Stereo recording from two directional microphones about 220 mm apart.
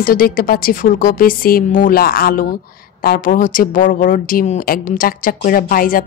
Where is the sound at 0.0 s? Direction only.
40° left (ahead or behind).